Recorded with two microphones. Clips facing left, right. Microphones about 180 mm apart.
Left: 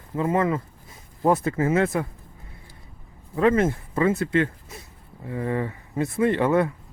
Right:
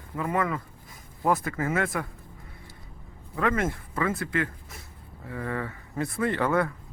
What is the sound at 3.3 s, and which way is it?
Speech, 25° left (ahead or behind).